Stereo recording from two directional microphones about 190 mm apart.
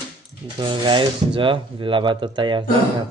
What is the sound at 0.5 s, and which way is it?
Speech, 25° right (ahead or behind).